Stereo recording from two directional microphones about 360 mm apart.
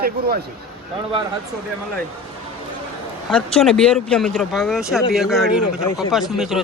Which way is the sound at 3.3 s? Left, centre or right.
Centre.